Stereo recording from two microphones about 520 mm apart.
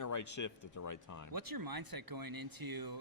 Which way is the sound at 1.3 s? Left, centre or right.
Right.